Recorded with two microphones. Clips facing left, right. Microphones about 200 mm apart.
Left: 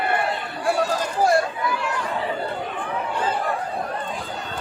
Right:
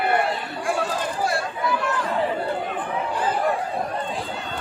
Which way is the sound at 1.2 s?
40° left (ahead or behind).